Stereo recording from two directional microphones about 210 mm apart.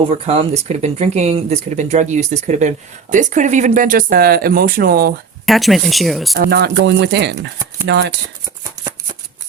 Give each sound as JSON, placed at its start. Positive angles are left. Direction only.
{"t": 0.3, "sound": "speech", "side_deg": -30}
{"t": 5.5, "sound": "speech", "side_deg": 0}
{"t": 6.3, "sound": "speech", "side_deg": -50}